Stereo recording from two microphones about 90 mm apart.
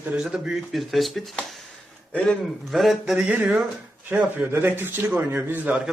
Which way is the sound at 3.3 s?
15° right (ahead or behind).